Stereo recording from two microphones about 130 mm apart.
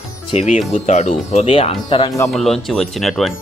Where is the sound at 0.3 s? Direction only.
60° left (ahead or behind).